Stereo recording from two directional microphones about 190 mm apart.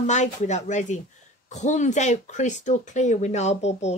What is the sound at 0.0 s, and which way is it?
Speech, 40° left (ahead or behind).